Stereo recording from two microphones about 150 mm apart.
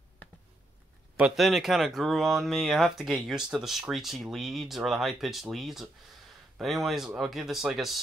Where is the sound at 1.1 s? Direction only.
5° right (ahead or behind).